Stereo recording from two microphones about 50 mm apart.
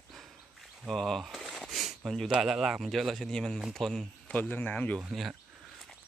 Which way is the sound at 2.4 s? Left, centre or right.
Centre.